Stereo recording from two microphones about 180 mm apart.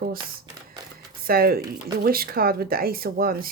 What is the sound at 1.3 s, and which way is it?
Speech, 55° right (ahead or behind).